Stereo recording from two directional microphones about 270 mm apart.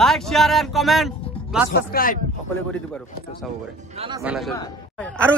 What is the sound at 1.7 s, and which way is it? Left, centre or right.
Speech, left.